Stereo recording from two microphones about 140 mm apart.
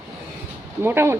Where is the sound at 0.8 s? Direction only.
15° right (ahead or behind).